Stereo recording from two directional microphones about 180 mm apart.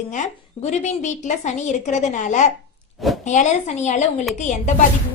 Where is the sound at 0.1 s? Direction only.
40° left (ahead or behind).